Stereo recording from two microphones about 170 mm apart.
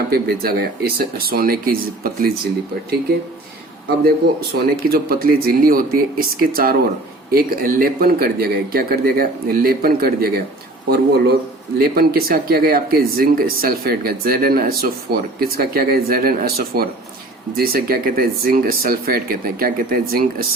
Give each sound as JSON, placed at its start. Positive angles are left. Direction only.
{"t": 0.1, "sound": "speech", "side_deg": -65}
{"t": 4.0, "sound": "speech", "side_deg": -60}